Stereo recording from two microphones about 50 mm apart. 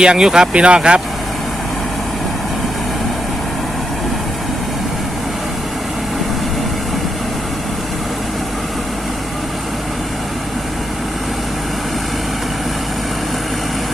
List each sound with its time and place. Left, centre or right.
0.0 s speech: centre